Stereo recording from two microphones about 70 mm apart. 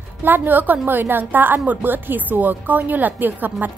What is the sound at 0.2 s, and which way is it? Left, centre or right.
Speech, right.